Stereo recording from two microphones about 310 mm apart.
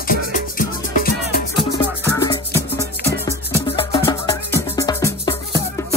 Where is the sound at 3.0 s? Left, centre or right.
Left.